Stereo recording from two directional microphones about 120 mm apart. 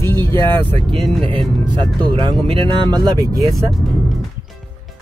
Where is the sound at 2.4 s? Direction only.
50° right (ahead or behind).